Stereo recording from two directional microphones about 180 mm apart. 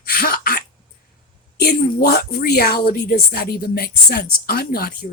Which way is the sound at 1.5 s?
60° left (ahead or behind).